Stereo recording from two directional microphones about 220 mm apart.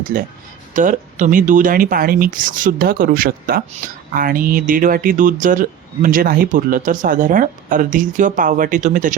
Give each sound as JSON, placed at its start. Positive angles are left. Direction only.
{"t": 0.1, "sound": "speech", "side_deg": -45}